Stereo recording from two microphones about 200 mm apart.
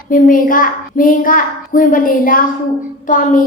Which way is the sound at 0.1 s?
40° left (ahead or behind).